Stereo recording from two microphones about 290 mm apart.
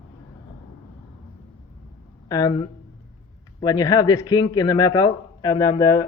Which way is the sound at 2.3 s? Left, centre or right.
Centre.